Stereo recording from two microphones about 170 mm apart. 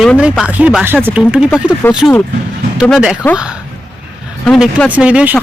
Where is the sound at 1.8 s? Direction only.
15° left (ahead or behind).